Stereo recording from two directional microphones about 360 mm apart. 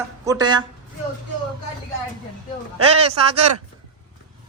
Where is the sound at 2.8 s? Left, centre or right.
Centre.